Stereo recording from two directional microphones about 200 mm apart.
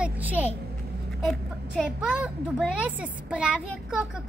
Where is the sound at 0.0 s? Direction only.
10° right (ahead or behind).